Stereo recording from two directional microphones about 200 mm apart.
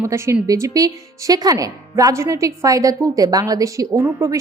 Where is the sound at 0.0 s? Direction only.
15° right (ahead or behind).